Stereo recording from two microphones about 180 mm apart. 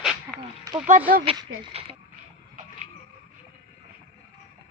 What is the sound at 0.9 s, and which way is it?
Speech, 50° right (ahead or behind).